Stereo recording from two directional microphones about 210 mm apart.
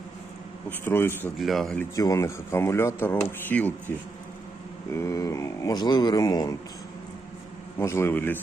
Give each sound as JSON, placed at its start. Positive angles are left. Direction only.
{"t": 0.7, "sound": "speech", "side_deg": 10}
{"t": 2.0, "sound": "speech", "side_deg": 15}
{"t": 4.9, "sound": "speech", "side_deg": 15}
{"t": 7.8, "sound": "speech", "side_deg": 10}